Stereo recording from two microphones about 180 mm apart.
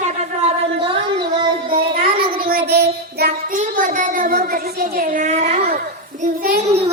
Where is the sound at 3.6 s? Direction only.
45° right (ahead or behind).